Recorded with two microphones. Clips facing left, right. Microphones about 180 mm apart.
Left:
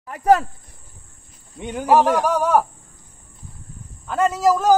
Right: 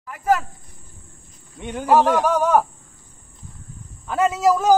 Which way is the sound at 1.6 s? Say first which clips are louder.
Left 1 dB; 10° left (ahead or behind).